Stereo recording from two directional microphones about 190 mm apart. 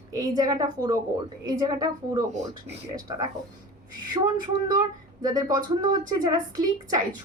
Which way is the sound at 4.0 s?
20° right (ahead or behind).